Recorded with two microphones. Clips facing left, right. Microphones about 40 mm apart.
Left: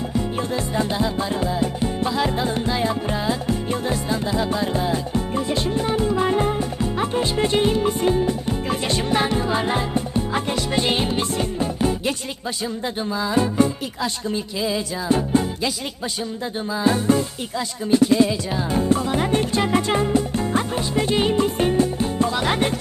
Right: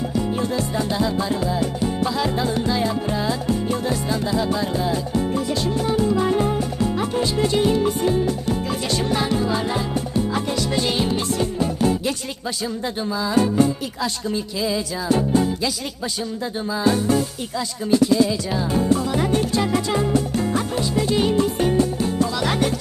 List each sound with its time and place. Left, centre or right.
0.3 s music: left
16.7 s music: left
17.9 s music: left
18.3 s music: left